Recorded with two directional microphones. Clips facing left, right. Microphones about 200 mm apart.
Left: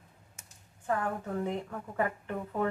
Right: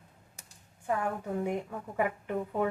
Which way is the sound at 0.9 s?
10° right (ahead or behind).